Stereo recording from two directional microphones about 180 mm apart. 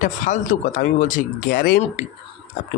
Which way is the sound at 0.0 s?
45° left (ahead or behind).